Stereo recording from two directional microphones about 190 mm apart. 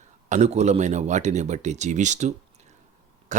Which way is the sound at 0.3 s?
40° right (ahead or behind).